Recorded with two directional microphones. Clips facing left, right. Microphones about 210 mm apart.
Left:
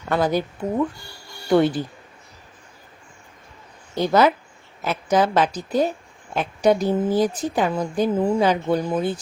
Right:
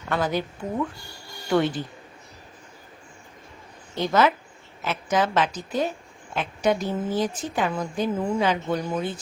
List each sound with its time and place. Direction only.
0.1 s a woman's voice: 40° left (ahead or behind)
1.5 s a woman's voice: 35° left (ahead or behind)
3.9 s a woman's voice: 35° left (ahead or behind)